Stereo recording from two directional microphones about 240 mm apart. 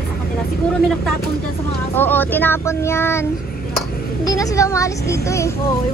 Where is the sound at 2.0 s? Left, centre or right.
Centre.